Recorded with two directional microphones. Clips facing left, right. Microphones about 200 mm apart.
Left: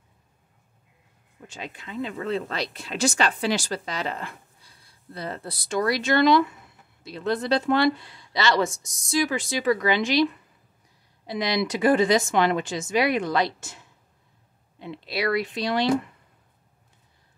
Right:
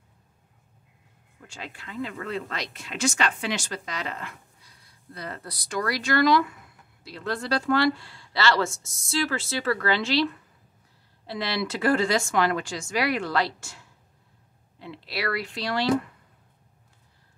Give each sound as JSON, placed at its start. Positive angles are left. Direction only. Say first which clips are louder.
{"t": 1.4, "sound": "speech", "louder": "left 3 dB", "side_deg": 20}